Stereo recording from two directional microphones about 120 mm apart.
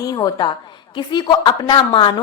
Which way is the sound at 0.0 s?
35° left (ahead or behind).